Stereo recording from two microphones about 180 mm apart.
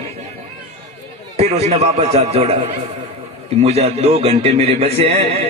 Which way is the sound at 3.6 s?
35° right (ahead or behind).